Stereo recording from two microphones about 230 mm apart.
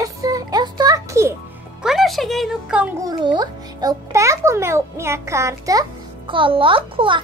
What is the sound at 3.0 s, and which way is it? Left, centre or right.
A child's voice, centre.